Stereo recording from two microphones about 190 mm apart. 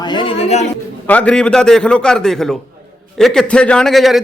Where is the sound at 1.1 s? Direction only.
5° left (ahead or behind).